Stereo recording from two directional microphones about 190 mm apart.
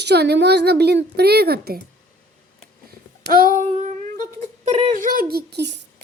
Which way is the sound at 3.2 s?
50° right (ahead or behind).